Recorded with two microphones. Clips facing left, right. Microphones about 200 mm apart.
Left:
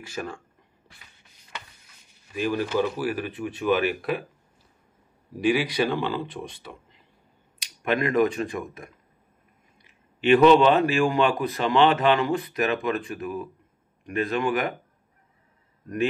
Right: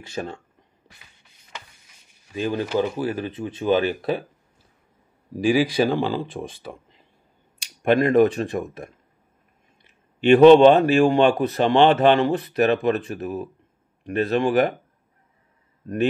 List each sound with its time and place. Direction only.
0.1 s speech: 25° right (ahead or behind)
2.3 s speech: 25° right (ahead or behind)
5.5 s speech: 35° right (ahead or behind)
7.5 s a sound: 30° right (ahead or behind)
8.1 s speech: 30° right (ahead or behind)
10.4 s speech: 30° right (ahead or behind)